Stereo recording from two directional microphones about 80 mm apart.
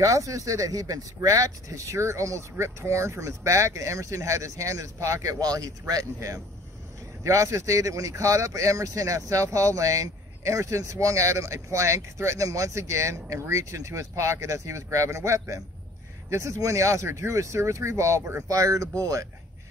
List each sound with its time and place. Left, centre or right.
0.0 s speech: right